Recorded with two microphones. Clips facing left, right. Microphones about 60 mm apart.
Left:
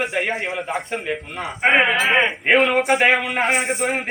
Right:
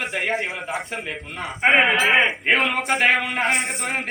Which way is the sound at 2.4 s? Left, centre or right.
Centre.